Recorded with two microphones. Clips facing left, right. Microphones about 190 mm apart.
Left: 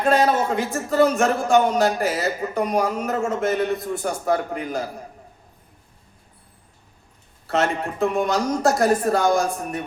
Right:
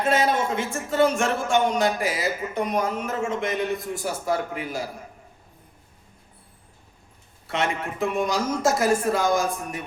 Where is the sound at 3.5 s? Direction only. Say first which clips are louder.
Left 3 dB; centre (ahead or behind).